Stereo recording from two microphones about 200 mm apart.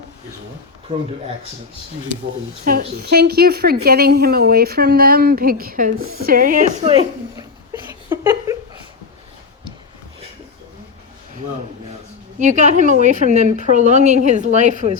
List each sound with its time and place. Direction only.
2.7 s a woman's voice: 45° right (ahead or behind)
6.0 s speech: 90° right
6.2 s a woman's voice: 45° right (ahead or behind)
7.3 s a sound: 10° right (ahead or behind)
12.4 s a woman's voice: 40° right (ahead or behind)